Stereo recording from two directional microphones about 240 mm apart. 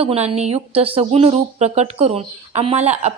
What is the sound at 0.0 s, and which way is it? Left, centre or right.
Speech, right.